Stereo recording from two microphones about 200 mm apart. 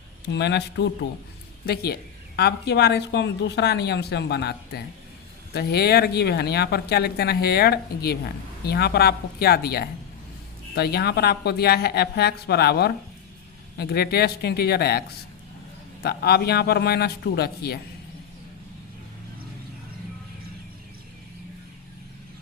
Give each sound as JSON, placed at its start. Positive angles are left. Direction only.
{"t": 0.3, "sound": "speech", "side_deg": 60}
{"t": 16.0, "sound": "speech", "side_deg": 50}